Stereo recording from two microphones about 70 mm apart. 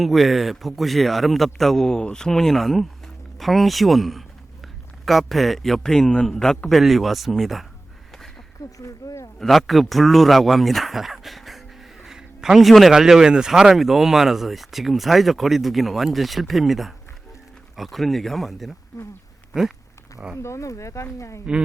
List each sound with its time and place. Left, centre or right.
0.0 s a man's voice: centre
8.8 s speech: left
9.4 s speech: centre
20.3 s speech: left